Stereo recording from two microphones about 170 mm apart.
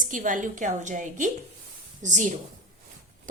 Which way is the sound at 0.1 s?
50° right (ahead or behind).